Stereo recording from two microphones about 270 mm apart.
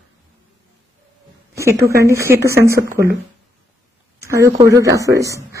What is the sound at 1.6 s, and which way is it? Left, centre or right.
Speech, centre.